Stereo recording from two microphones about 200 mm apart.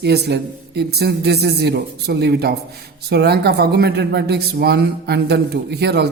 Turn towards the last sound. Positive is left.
turn(degrees=-55)  # may be behind; listen again after turning